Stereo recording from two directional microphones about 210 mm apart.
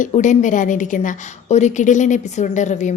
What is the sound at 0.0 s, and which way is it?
A woman's voice, 35° left (ahead or behind).